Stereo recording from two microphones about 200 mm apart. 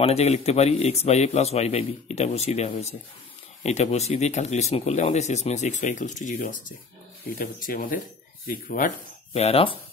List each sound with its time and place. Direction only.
0.0 s speech: 30° left (ahead or behind)